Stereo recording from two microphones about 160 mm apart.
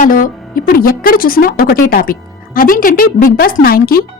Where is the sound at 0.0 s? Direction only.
55° left (ahead or behind).